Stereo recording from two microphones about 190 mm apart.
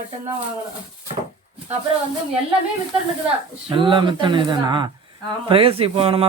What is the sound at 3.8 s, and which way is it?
A man's voice, 25° right (ahead or behind).